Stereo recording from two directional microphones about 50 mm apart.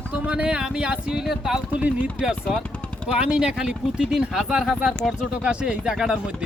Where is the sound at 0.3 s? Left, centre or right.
Centre.